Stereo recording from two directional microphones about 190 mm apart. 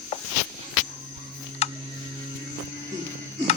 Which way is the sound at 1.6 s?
35° left (ahead or behind).